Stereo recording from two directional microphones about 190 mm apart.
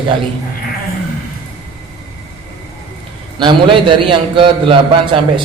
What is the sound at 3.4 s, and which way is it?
A man's voice, 25° right (ahead or behind).